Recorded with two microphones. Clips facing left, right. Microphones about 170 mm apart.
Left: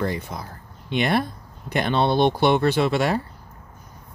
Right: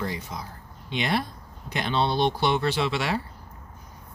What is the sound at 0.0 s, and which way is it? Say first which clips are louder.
Speech: left 5 dB; 55° left (ahead or behind).